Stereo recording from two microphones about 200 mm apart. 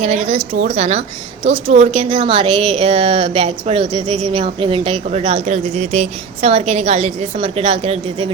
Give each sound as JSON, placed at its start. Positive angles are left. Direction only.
{"t": 0.0, "sound": "a woman's voice", "side_deg": -35}